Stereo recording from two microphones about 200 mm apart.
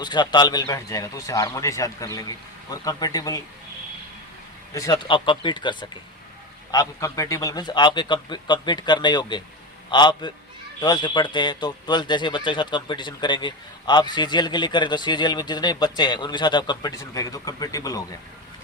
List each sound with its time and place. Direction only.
0.0 s speech: 20° left (ahead or behind)
4.7 s speech: 20° left (ahead or behind)